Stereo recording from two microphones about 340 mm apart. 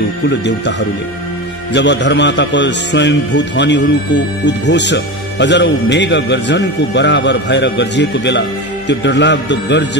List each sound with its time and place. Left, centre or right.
0.5 s a man's voice: left